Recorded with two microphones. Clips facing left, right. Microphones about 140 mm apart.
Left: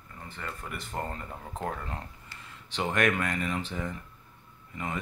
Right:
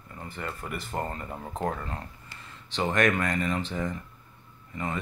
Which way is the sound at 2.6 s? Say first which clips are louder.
Right 2 dB; 10° left (ahead or behind).